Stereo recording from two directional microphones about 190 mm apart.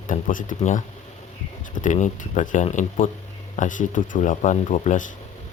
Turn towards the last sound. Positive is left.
turn(degrees=40)  # may be behind; listen again after turning